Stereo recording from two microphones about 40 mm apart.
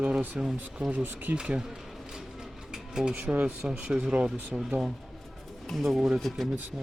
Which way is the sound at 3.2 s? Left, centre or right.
Right.